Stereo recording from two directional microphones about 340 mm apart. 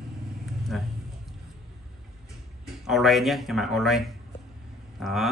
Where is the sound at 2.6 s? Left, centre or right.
Centre.